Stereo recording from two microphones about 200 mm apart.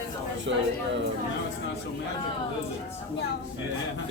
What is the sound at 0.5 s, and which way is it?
Speech, 70° right (ahead or behind).